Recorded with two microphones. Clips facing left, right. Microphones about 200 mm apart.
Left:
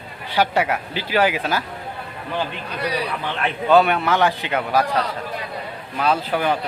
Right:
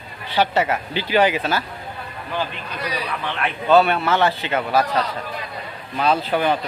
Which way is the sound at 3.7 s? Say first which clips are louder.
Even; 15° left (ahead or behind).